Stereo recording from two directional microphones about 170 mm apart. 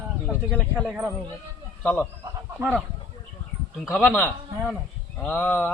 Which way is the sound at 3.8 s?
Centre (ahead or behind).